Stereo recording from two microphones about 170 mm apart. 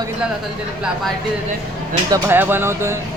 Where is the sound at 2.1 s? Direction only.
15° right (ahead or behind).